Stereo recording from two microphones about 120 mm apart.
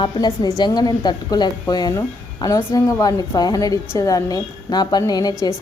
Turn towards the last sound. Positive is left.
turn(degrees=35)  # may be behind; listen again after turning